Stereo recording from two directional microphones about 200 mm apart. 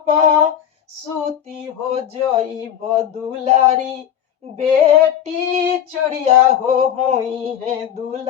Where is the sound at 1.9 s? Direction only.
30° right (ahead or behind).